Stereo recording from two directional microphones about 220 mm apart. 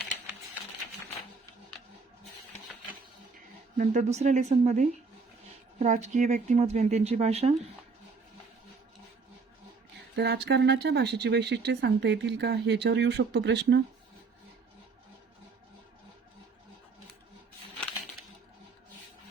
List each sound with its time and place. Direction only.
3.8 s speech: 30° right (ahead or behind)
10.2 s speech: 50° right (ahead or behind)